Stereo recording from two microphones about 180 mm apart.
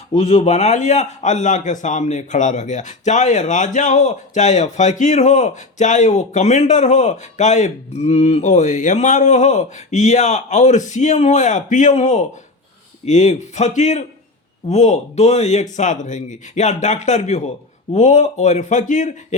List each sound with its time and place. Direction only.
0.1 s a man's voice: 35° left (ahead or behind)